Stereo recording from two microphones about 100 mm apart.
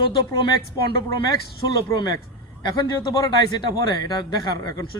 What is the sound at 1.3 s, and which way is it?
A man's voice, 40° left (ahead or behind).